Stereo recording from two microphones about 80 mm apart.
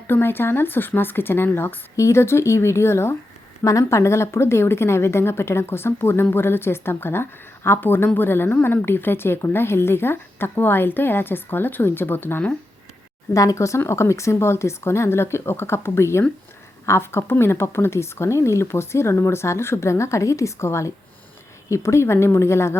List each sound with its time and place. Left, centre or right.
0.1 s a woman's voice: left
13.3 s speech: left